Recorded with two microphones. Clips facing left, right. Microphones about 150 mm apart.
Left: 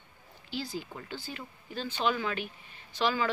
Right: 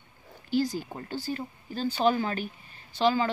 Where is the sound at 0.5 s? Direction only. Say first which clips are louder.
Right 9 dB; 45° right (ahead or behind).